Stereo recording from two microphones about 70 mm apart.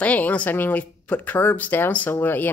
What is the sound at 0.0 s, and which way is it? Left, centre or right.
Speech, left.